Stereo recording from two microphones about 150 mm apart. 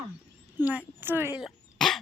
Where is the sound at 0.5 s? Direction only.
10° right (ahead or behind).